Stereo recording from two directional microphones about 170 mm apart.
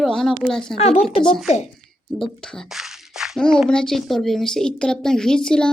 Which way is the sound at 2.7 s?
Centre (ahead or behind).